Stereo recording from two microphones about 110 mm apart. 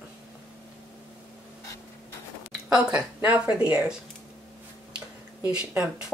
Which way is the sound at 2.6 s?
10° right (ahead or behind).